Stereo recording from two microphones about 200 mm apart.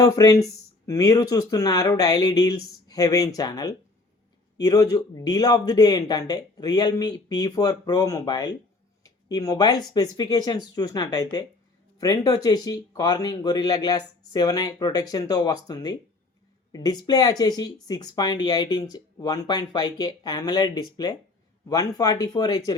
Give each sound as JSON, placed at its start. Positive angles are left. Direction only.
{"t": 0.0, "sound": "speech", "side_deg": 15}